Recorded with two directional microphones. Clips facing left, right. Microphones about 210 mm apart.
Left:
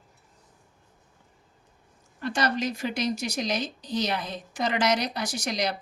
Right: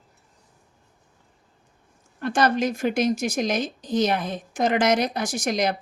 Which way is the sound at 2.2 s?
50° right (ahead or behind).